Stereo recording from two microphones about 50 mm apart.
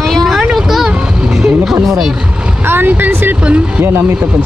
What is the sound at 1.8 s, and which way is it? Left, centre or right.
Speech, centre.